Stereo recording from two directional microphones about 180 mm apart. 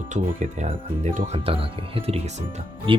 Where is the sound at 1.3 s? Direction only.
30° right (ahead or behind).